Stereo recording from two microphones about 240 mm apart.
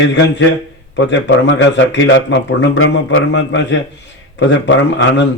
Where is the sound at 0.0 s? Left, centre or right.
Left.